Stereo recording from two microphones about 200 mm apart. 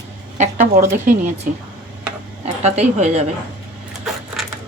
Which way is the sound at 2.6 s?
35° right (ahead or behind).